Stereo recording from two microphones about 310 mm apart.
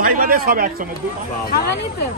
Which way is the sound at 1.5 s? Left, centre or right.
Left.